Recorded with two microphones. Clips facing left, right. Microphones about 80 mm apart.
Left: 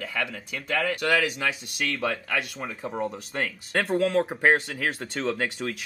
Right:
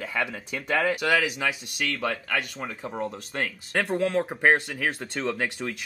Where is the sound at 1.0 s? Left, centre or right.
Centre.